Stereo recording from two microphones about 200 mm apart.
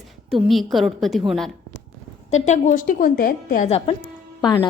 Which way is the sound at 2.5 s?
40° left (ahead or behind).